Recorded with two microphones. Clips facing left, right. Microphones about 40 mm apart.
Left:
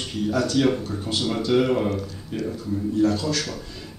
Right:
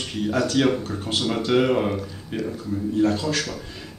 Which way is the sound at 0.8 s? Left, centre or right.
Right.